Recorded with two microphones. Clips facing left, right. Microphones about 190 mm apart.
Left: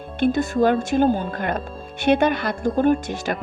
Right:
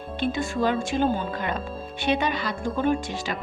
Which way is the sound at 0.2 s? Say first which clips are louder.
Left 7 dB; 45° left (ahead or behind).